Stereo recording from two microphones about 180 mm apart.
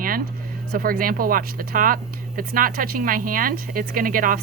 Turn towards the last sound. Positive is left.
turn(degrees=-50)  # may be behind; listen again after turning